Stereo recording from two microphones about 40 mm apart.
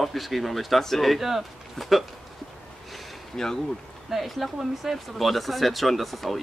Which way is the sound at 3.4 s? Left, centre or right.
Centre.